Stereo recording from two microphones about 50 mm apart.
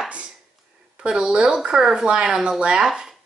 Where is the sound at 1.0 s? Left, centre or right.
Centre.